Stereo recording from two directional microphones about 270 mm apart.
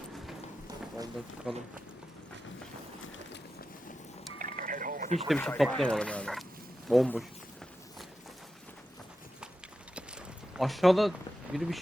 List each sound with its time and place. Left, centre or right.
1.5 s speech: centre
4.4 s a sound: right
5.3 s speech: centre
10.5 s speech: centre